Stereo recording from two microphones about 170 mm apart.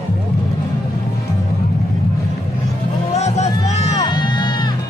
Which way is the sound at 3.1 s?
40° left (ahead or behind).